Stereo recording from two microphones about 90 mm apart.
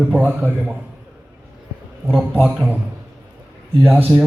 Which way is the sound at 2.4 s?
5° right (ahead or behind).